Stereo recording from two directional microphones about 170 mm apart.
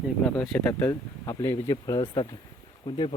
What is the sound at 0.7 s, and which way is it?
Speech, 15° left (ahead or behind).